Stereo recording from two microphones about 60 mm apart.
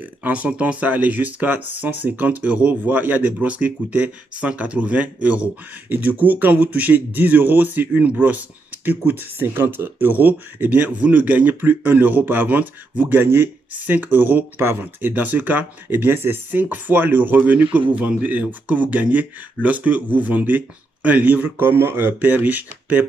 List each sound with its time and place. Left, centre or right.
0.0 s speech: right
16.6 s speech: right